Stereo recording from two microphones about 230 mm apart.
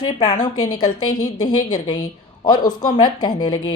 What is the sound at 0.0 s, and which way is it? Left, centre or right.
Speech, centre.